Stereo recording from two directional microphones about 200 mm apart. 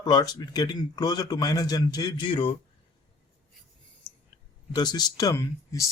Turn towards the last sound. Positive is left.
turn(degrees=15)  # may be behind; listen again after turning